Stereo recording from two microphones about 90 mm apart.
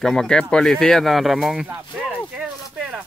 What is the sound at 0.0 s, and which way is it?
Speech, 5° left (ahead or behind).